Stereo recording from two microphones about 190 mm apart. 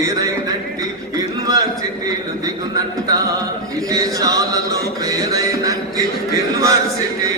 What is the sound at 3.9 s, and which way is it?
Chant, 20° right (ahead or behind).